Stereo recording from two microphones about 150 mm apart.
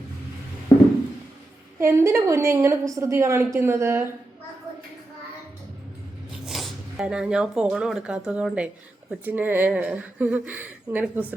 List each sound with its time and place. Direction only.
0.7 s a sound: 15° left (ahead or behind)
1.8 s speech: 15° right (ahead or behind)
6.4 s speech: centre (ahead or behind)